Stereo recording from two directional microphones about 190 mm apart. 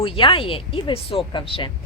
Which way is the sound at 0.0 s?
25° left (ahead or behind).